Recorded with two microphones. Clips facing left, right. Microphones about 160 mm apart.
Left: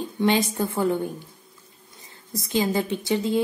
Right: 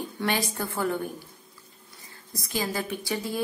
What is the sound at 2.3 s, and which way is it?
A woman's voice, 20° left (ahead or behind).